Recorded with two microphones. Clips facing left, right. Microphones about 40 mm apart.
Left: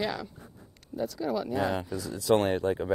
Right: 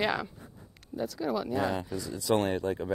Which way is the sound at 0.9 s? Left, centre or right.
Centre.